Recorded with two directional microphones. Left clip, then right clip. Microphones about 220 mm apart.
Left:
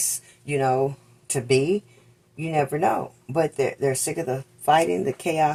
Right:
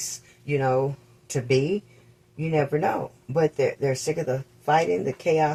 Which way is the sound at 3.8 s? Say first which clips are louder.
Left 1 dB; 45° left (ahead or behind).